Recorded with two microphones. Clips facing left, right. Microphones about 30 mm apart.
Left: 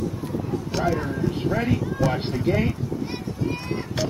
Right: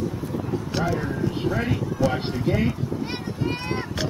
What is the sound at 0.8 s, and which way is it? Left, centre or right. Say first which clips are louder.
Speech: left 2 dB; right.